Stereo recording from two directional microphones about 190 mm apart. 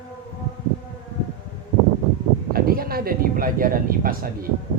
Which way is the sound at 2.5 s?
50° right (ahead or behind).